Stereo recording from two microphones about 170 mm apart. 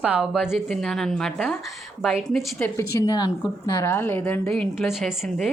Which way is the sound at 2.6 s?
15° left (ahead or behind).